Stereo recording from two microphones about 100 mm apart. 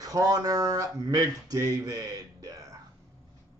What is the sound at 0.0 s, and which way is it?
Speech, 35° right (ahead or behind).